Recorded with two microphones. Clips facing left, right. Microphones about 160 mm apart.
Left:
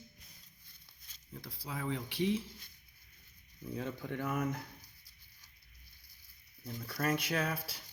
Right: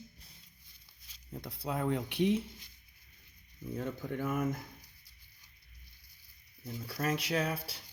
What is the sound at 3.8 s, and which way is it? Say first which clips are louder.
Speech: right 2 dB; 45° right (ahead or behind).